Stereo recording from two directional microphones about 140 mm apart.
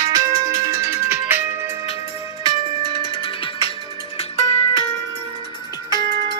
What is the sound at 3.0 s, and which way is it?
Music, 40° left (ahead or behind).